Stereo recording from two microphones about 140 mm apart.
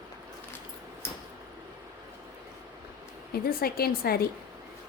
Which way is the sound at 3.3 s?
90° left.